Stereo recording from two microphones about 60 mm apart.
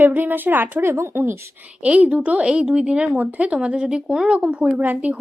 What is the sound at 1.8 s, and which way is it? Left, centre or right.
Speech, right.